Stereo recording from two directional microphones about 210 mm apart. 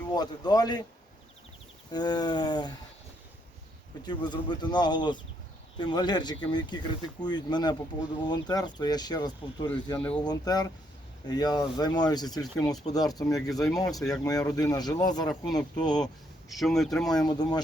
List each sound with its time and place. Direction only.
0.1 s speech: 20° left (ahead or behind)
1.9 s speech: 20° left (ahead or behind)
4.0 s speech: 20° left (ahead or behind)
16.5 s speech: centre (ahead or behind)
17.1 s speech: 20° left (ahead or behind)